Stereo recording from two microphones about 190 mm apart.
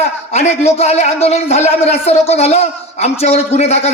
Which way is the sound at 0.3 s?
35° left (ahead or behind).